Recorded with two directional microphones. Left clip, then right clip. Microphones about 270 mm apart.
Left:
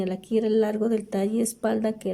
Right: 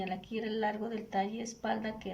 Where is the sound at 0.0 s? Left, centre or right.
Left.